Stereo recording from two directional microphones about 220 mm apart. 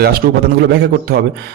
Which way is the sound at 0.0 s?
45° right (ahead or behind).